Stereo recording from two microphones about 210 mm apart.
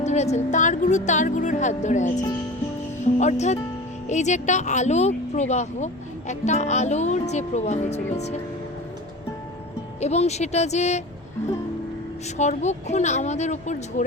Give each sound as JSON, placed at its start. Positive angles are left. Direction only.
{"t": 0.0, "sound": "speech", "side_deg": 30}
{"t": 10.0, "sound": "speech", "side_deg": 30}
{"t": 12.4, "sound": "speech", "side_deg": 35}